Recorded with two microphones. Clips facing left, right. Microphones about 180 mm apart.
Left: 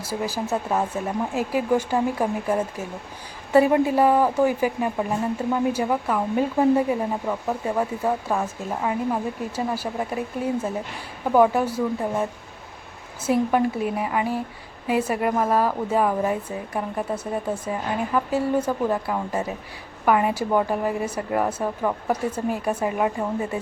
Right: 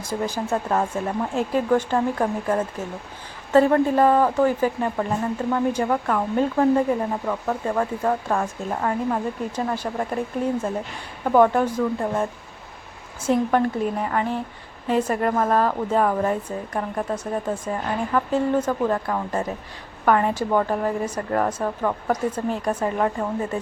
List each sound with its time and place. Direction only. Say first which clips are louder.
0.0 s speech: right 1 dB; 5° left (ahead or behind)